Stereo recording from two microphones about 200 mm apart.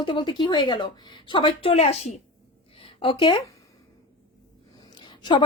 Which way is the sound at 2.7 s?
25° left (ahead or behind).